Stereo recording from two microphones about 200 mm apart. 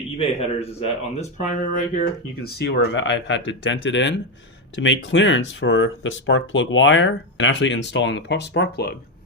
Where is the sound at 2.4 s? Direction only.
65° left (ahead or behind).